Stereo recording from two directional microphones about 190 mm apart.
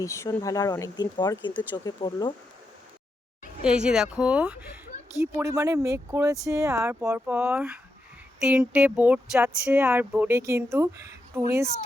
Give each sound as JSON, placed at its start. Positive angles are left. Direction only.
{"t": 0.0, "sound": "speech", "side_deg": 15}
{"t": 3.6, "sound": "speech", "side_deg": -5}